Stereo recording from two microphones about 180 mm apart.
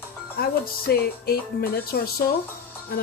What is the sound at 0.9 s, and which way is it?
Speech, 60° left (ahead or behind).